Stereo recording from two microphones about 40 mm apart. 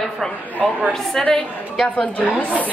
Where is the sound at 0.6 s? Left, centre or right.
Centre.